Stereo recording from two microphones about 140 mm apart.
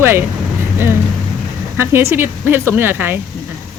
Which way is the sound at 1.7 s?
20° right (ahead or behind).